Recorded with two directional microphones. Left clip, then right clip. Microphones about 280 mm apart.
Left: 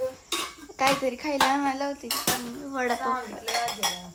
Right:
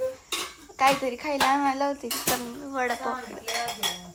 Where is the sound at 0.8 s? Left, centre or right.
Centre.